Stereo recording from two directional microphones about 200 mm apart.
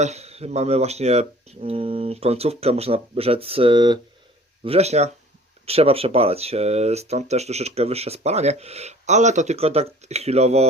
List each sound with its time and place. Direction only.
0.0 s speech: 35° right (ahead or behind)